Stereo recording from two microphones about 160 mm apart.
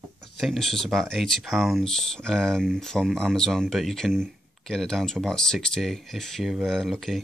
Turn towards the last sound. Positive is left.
turn(degrees=0)  # may be behind; listen again after turning